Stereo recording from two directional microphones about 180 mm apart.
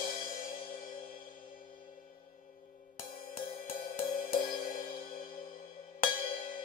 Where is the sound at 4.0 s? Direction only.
40° left (ahead or behind).